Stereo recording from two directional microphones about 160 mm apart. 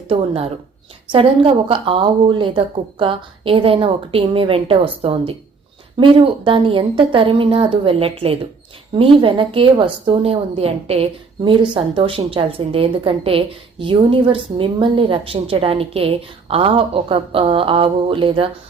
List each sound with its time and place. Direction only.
0.1 s a woman's voice: 40° right (ahead or behind)